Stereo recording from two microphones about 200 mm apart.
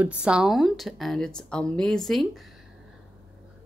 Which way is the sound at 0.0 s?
5° right (ahead or behind).